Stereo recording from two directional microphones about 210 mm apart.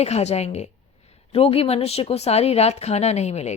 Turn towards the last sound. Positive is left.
turn(degrees=30)  # may be behind; listen again after turning